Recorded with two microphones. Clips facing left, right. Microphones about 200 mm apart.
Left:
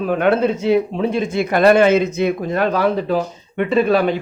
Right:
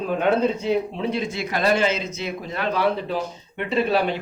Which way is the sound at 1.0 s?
50° left (ahead or behind).